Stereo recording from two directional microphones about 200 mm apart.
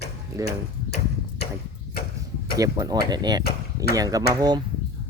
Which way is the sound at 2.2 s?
15° right (ahead or behind).